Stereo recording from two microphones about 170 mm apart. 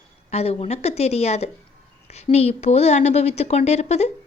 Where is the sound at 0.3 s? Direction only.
35° left (ahead or behind).